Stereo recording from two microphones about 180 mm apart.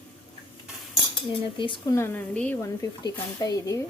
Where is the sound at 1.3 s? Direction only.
25° left (ahead or behind).